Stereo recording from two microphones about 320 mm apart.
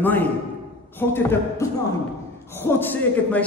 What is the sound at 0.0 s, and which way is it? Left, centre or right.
A man's voice, centre.